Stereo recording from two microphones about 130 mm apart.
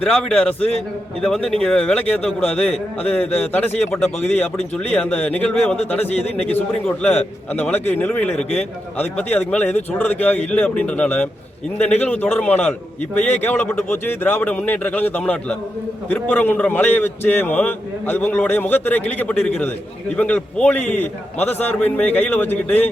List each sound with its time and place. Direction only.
0.1 s a man's voice: 10° left (ahead or behind)
6.3 s a man's voice: 55° left (ahead or behind)
6.8 s a man's voice: 10° left (ahead or behind)